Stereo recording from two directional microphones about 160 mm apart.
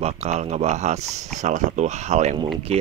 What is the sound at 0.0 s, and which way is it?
Speech, 45° right (ahead or behind).